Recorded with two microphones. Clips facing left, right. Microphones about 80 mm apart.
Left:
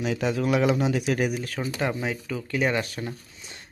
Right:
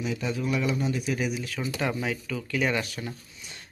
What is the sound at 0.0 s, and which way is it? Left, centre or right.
Speech, left.